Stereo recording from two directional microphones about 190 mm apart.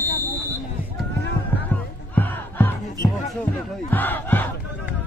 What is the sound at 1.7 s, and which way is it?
Music, 10° left (ahead or behind).